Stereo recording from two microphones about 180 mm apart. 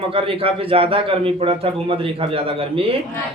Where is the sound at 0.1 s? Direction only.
30° right (ahead or behind).